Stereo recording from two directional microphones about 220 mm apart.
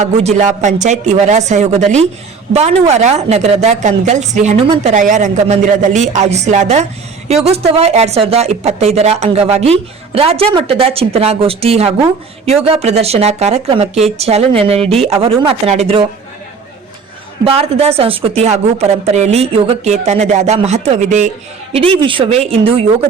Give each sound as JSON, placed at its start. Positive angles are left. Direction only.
{"t": 0.0, "sound": "a woman's voice", "side_deg": -30}
{"t": 17.4, "sound": "a woman's voice", "side_deg": -25}